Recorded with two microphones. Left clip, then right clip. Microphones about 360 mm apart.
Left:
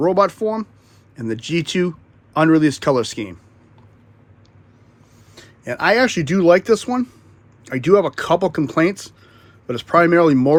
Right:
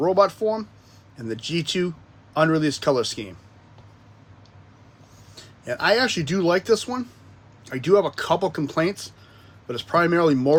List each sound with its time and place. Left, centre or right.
0.0 s speech: left
5.3 s speech: centre